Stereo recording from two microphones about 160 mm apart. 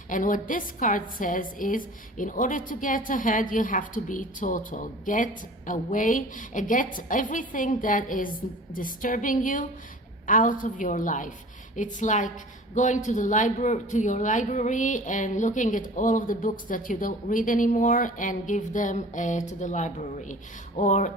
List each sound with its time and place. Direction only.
0.1 s a woman's voice: 55° left (ahead or behind)